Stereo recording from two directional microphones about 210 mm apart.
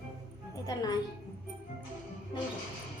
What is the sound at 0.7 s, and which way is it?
Speech, 20° left (ahead or behind).